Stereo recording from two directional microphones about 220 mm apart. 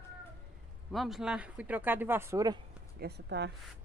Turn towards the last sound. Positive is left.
turn(degrees=-50)  # may be behind; listen again after turning